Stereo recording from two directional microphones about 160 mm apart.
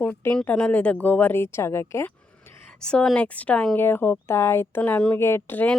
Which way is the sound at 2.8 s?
5° left (ahead or behind).